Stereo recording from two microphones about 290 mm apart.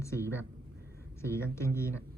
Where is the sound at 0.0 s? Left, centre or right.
Centre.